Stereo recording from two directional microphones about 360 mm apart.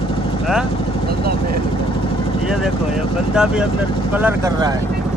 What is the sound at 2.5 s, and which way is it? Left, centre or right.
Speech, centre.